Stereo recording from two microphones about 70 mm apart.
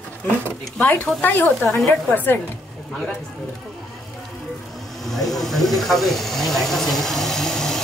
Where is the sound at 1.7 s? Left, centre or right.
Centre.